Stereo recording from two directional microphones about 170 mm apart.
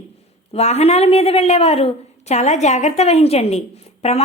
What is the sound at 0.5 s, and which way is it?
A woman's voice, 40° left (ahead or behind).